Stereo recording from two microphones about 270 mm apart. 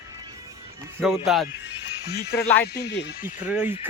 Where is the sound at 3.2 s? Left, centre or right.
Centre.